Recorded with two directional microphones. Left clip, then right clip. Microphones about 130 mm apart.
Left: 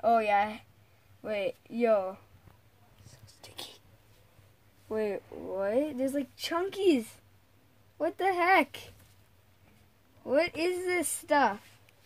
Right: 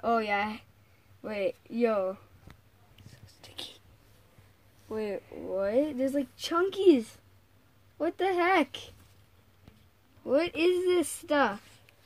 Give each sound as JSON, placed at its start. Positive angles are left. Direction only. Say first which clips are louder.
{"t": 0.0, "sound": "speech", "louder": "left 3 dB", "side_deg": 20}
{"t": 3.3, "sound": "whispering", "louder": "right 2 dB", "side_deg": 45}
{"t": 4.8, "sound": "speech", "louder": "left 2 dB", "side_deg": 55}
{"t": 5.5, "sound": "speech", "louder": "right 2 dB", "side_deg": 35}
{"t": 10.2, "sound": "speech", "louder": "right 2 dB", "side_deg": 20}